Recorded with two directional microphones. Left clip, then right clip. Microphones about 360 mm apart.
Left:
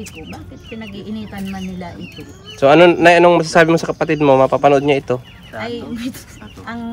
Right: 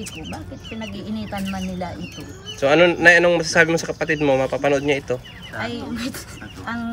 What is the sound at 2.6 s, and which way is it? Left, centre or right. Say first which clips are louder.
A man's voice: left 5 dB; centre.